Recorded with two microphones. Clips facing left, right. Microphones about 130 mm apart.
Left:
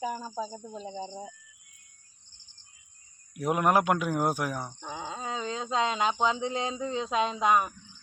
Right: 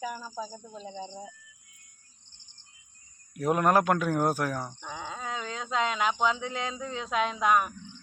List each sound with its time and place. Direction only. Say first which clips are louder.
0.0 s speech: left 3 dB; 25° left (ahead or behind)
0.8 s speech: left 2 dB; 10° left (ahead or behind)
3.3 s speech: right 1 dB; 15° left (ahead or behind)
4.9 s speech: left 3 dB; 25° left (ahead or behind)